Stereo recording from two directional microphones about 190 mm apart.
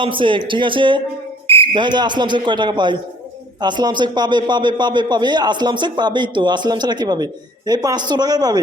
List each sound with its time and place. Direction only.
0.0 s a man's voice: 25° right (ahead or behind)